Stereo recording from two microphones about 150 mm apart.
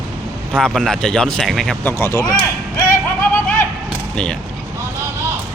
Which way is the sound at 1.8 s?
15° left (ahead or behind).